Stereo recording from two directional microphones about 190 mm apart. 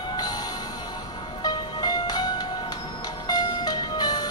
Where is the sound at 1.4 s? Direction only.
20° left (ahead or behind).